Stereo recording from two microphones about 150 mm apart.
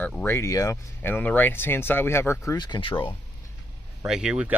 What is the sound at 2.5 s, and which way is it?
Speech, 30° left (ahead or behind).